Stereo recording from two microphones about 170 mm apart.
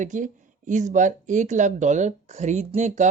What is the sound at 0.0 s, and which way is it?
Speech, 50° right (ahead or behind).